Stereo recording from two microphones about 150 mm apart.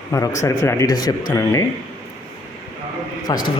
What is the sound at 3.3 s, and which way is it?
Speech, 30° left (ahead or behind).